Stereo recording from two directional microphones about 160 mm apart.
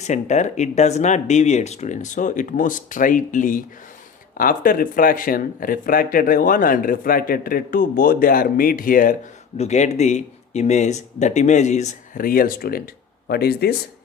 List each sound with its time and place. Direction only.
0.0 s speech: 45° left (ahead or behind)
9.6 s speech: 45° left (ahead or behind); by 13.7 s 80° left